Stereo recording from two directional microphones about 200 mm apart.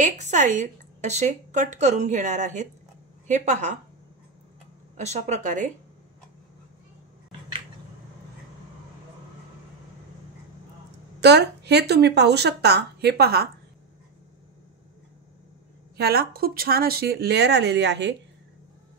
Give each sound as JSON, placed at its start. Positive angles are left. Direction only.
{"t": 0.2, "sound": "a woman's voice", "side_deg": -35}
{"t": 4.9, "sound": "a woman's voice", "side_deg": -35}
{"t": 11.1, "sound": "speech", "side_deg": -55}
{"t": 16.0, "sound": "speech", "side_deg": -50}